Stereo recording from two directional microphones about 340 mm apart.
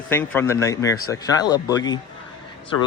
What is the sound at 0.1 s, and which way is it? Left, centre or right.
Speech, centre.